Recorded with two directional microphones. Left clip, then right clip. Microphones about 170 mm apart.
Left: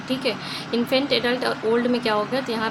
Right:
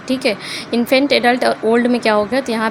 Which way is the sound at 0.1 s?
40° right (ahead or behind).